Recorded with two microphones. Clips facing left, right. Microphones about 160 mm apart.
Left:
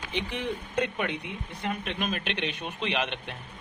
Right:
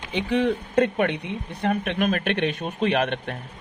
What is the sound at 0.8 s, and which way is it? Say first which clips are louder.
Speech: right 8 dB; 55° right (ahead or behind).